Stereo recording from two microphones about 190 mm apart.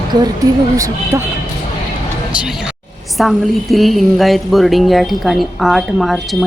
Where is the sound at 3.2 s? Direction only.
Centre (ahead or behind).